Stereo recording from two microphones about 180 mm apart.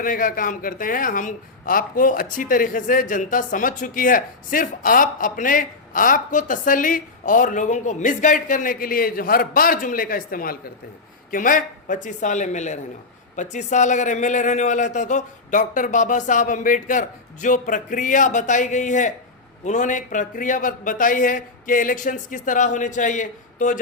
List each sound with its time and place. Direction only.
0.0 s a man's voice: 50° left (ahead or behind)